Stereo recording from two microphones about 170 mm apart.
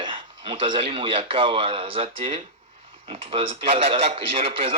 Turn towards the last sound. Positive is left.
turn(degrees=-35)  # may be behind; listen again after turning